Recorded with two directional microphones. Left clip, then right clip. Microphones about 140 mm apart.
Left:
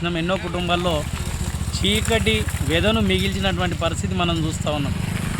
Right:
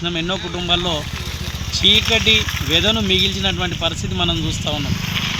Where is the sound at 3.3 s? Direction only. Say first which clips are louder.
Right 3 dB; 5° left (ahead or behind).